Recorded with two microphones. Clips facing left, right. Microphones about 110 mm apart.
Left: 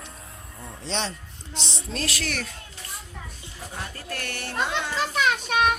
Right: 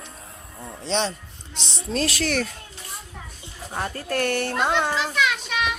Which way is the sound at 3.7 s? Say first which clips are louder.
Right 9 dB; 55° right (ahead or behind).